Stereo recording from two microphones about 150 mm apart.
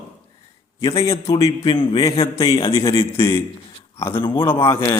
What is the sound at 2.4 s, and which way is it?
Speech, 25° left (ahead or behind).